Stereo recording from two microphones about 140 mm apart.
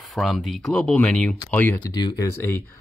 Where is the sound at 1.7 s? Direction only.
25° left (ahead or behind).